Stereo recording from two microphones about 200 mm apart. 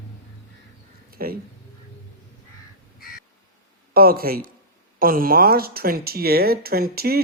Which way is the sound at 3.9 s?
45° right (ahead or behind).